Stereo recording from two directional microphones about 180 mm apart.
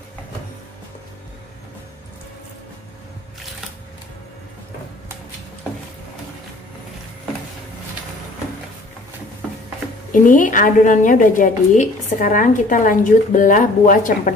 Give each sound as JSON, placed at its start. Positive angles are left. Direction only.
{"t": 10.1, "sound": "a woman's voice", "side_deg": 45}